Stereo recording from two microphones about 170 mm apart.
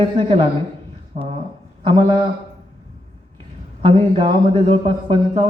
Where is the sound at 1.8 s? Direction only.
30° right (ahead or behind).